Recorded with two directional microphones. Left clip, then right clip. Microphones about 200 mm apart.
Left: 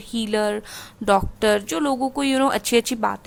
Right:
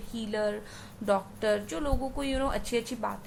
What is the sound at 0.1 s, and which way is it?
A woman's voice, 45° left (ahead or behind).